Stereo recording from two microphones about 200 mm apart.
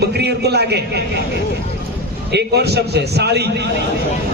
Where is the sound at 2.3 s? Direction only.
55° right (ahead or behind).